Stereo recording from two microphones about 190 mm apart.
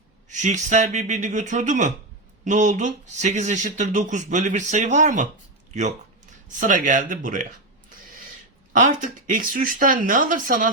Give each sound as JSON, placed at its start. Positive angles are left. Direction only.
{"t": 0.3, "sound": "speech", "side_deg": -40}
{"t": 6.6, "sound": "speech", "side_deg": -45}
{"t": 9.3, "sound": "speech", "side_deg": -45}